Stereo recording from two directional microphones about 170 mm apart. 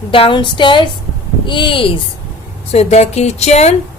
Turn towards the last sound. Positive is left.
turn(degrees=40)  # may be behind; listen again after turning